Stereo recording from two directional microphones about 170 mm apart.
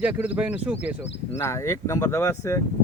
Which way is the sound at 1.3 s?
15° left (ahead or behind).